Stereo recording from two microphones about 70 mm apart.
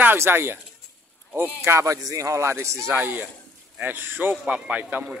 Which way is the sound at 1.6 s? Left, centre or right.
Right.